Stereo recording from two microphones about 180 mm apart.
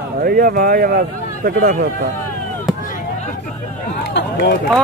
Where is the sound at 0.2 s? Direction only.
55° right (ahead or behind).